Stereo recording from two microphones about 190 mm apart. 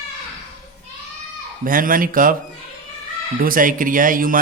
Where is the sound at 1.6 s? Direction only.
45° right (ahead or behind).